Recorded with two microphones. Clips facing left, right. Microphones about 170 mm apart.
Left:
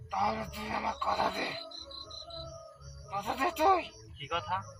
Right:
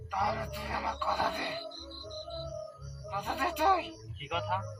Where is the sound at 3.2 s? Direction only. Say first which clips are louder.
Left 2 dB; 25° left (ahead or behind).